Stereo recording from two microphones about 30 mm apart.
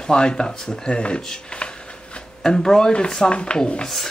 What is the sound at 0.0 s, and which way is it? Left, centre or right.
Speech, left.